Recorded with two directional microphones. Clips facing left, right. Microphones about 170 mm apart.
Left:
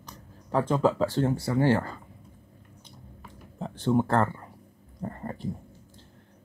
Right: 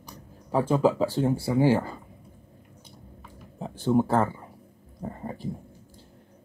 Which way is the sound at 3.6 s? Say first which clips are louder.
Right 2 dB; 10° right (ahead or behind).